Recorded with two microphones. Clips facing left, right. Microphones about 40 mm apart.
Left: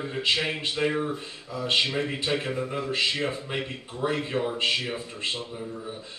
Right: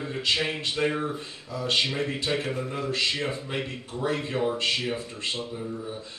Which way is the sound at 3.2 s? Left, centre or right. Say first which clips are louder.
Left 1 dB; centre.